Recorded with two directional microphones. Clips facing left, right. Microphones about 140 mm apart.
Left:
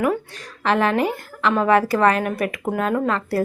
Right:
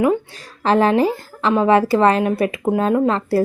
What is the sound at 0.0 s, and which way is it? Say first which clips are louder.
Speech: right 4 dB; 25° right (ahead or behind).